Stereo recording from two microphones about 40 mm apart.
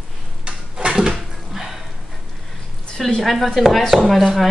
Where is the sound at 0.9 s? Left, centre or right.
Centre.